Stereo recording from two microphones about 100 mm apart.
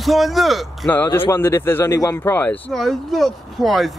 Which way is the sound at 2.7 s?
Centre (ahead or behind).